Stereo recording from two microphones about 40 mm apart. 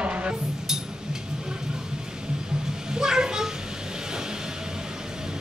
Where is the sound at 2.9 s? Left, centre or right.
Centre.